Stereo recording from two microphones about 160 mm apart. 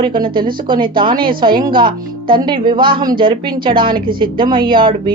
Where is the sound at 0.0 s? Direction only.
30° right (ahead or behind).